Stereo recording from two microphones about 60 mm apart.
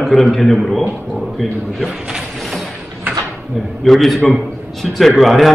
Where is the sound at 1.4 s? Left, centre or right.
Centre.